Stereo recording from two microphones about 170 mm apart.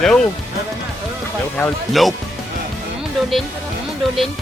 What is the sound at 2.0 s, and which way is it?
Speech, centre (ahead or behind).